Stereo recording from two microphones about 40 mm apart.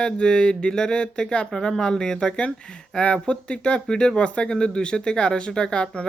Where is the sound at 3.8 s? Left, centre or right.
Centre.